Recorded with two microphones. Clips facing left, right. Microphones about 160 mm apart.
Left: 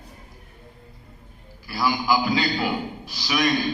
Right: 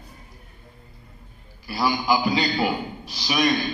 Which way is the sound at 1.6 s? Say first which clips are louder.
Even; 20° right (ahead or behind).